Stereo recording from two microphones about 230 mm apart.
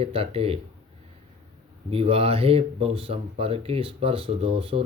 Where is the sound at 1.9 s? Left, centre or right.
Right.